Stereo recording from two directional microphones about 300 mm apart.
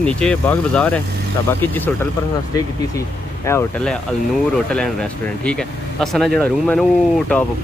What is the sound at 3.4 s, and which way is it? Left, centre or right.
Speech, centre.